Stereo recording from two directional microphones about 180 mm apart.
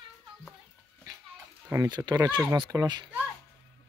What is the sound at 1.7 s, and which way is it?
Speech, 20° right (ahead or behind).